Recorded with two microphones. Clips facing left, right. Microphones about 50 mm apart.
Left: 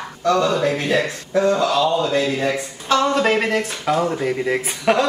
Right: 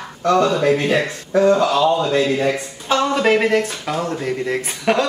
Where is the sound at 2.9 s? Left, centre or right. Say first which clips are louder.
Right 1 dB; centre.